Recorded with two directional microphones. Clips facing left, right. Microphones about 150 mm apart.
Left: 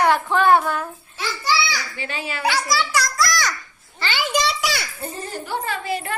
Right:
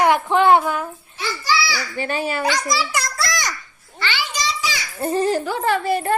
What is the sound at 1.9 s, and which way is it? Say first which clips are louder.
Speech: right 7 dB; 50° right (ahead or behind).